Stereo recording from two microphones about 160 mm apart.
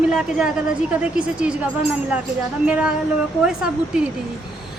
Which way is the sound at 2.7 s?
5° right (ahead or behind).